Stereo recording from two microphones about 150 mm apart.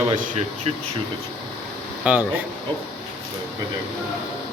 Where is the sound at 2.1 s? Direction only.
10° right (ahead or behind).